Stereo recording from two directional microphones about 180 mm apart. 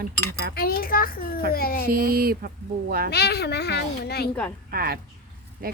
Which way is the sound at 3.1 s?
65° left (ahead or behind).